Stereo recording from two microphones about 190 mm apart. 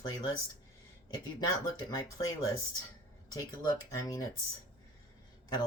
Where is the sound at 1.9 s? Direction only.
20° left (ahead or behind).